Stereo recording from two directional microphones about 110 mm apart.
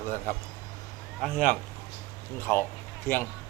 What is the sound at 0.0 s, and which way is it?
Speech, 20° left (ahead or behind).